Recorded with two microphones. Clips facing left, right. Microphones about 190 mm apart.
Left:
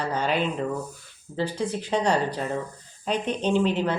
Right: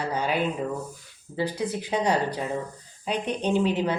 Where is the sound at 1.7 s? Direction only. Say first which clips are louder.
Left 1 dB; 15° right (ahead or behind).